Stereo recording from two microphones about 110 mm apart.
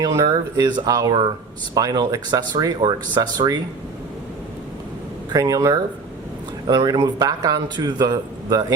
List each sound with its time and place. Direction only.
0.0 s a man's voice: 35° right (ahead or behind)
5.3 s a man's voice: 30° right (ahead or behind)